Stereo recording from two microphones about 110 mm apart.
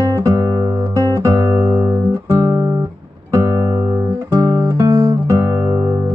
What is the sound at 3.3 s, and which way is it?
Music, 30° right (ahead or behind).